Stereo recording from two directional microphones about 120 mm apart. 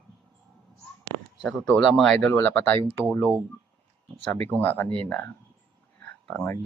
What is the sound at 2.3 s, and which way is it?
Speech, 20° left (ahead or behind).